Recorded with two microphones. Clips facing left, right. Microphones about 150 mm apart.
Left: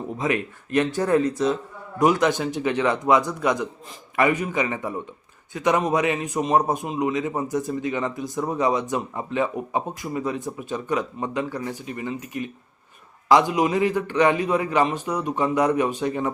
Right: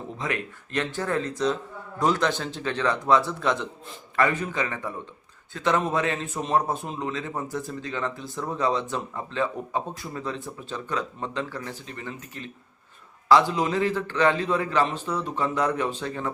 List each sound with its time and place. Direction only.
0.2 s speech: 20° left (ahead or behind)